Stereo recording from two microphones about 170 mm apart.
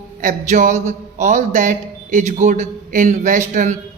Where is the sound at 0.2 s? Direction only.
50° right (ahead or behind).